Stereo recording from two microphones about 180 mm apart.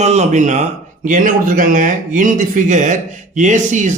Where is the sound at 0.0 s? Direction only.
40° right (ahead or behind).